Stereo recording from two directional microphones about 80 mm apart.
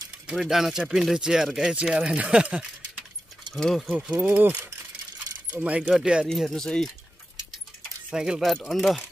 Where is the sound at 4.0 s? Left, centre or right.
Centre.